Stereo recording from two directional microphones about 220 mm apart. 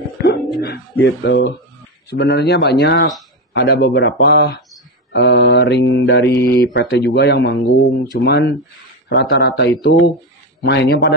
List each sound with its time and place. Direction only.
0.2 s speech: 45° left (ahead or behind)
2.0 s mantra: 50° left (ahead or behind)